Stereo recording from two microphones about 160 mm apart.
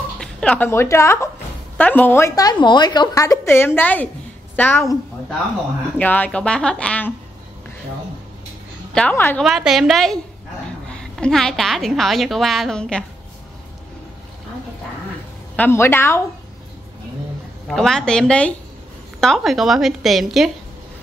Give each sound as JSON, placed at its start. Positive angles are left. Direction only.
{"t": 0.2, "sound": "a woman's voice", "side_deg": 5}
{"t": 5.9, "sound": "a woman's voice", "side_deg": 10}
{"t": 8.9, "sound": "a woman's voice", "side_deg": 10}
{"t": 9.4, "sound": "a woman's voice", "side_deg": -5}
{"t": 15.5, "sound": "a woman's voice", "side_deg": 15}
{"t": 17.6, "sound": "a woman's voice", "side_deg": 0}